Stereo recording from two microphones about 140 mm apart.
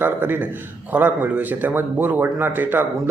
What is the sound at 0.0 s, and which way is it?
Speech, 15° right (ahead or behind).